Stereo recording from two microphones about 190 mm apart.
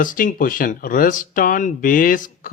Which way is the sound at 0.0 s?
45° left (ahead or behind).